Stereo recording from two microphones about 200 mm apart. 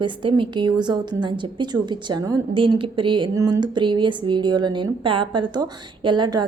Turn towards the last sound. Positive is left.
turn(degrees=-20)  # may be behind; listen again after turning